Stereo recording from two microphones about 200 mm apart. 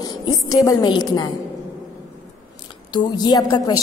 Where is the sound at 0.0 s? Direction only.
20° left (ahead or behind).